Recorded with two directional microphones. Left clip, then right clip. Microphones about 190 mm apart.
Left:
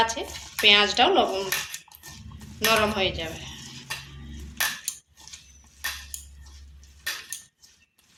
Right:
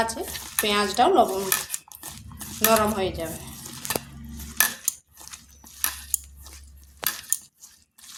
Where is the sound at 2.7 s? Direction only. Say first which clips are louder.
Right 1 dB; 45° right (ahead or behind).